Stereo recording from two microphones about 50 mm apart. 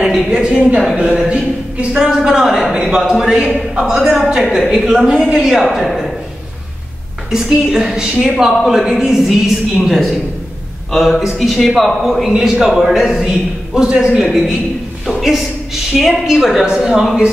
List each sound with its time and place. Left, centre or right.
0.0 s a woman's voice: centre
1.3 s speech: right
2.0 s a woman's voice: centre
7.2 s a woman's voice: centre